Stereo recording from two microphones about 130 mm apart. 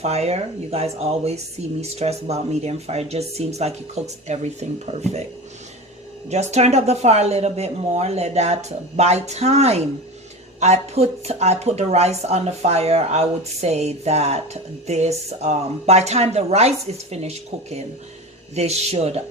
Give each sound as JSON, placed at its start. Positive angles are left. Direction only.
{"t": 0.0, "sound": "speech", "side_deg": -55}
{"t": 6.2, "sound": "speech", "side_deg": -60}